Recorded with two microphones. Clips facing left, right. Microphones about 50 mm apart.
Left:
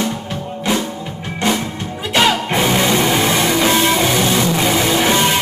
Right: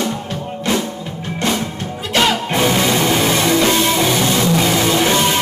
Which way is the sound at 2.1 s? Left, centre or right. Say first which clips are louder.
Left 1 dB; centre.